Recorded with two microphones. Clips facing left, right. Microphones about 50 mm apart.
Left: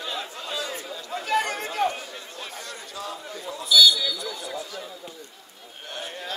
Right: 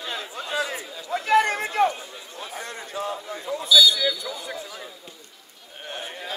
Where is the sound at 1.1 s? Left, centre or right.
Right.